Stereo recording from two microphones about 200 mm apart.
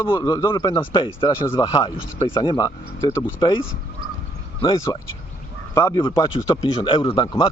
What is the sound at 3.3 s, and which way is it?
Speech, 25° left (ahead or behind).